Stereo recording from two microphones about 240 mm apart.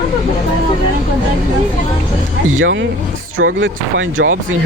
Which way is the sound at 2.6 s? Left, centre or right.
Right.